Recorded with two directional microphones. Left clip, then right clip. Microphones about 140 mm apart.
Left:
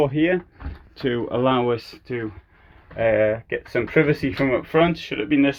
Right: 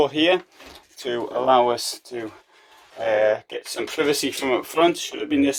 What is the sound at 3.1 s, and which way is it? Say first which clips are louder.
A man's voice: right 2 dB; 30° right (ahead or behind).